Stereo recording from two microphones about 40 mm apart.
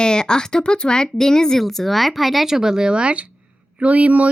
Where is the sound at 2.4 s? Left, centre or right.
Centre; by 4.3 s right.